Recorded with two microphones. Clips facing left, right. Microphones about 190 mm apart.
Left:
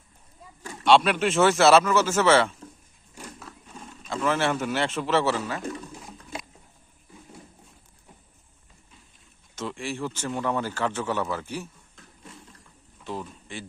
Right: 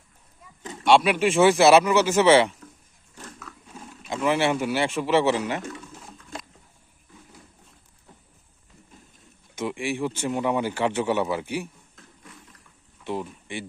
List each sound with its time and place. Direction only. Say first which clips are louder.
0.6 s speech: right 1 dB; 20° right (ahead or behind)
3.2 s biting: left 1 dB; 10° left (ahead or behind)
3.7 s speech: right 1 dB; 10° right (ahead or behind)
5.6 s pigeon: left 3 dB; 35° left (ahead or behind)
5.9 s a sound: left 2 dB; 10° left (ahead or behind)
9.6 s a sound: right 4 dB; 15° right (ahead or behind)
10.2 s speech: right 3 dB; 15° right (ahead or behind)
12.0 s a sound: right 1 dB; centre (ahead or behind)
13.1 s speech: right 4 dB; 15° right (ahead or behind)